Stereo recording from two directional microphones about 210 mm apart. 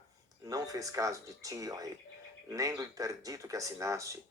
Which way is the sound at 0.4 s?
15° right (ahead or behind).